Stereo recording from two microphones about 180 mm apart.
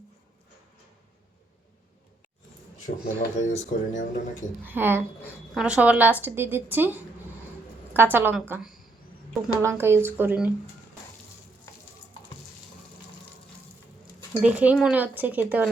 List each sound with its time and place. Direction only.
2.7 s speech: 45° left (ahead or behind)
4.6 s speech: 10° right (ahead or behind)
14.4 s speech: 5° right (ahead or behind)